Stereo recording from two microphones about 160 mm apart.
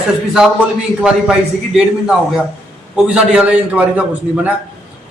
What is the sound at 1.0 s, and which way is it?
A man's voice, 5° right (ahead or behind).